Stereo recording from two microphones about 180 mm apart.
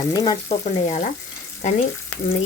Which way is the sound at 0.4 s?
40° left (ahead or behind).